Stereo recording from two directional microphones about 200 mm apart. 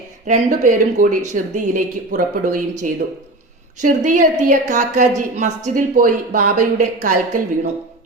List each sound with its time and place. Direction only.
0.3 s a woman's voice: 40° right (ahead or behind)